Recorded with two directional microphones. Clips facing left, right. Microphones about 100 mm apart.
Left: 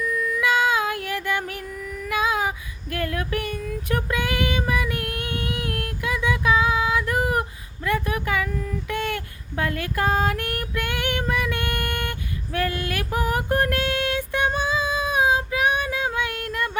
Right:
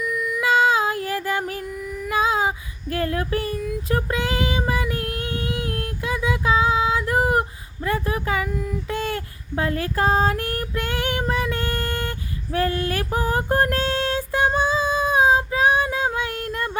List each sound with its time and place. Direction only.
0.4 s child singing: 30° right (ahead or behind)
2.0 s a sound: 30° right (ahead or behind)
2.9 s child singing: 30° right (ahead or behind)
7.9 s a sound: 30° right (ahead or behind)
8.9 s child singing: 30° right (ahead or behind)
12.5 s female singing: 30° right (ahead or behind)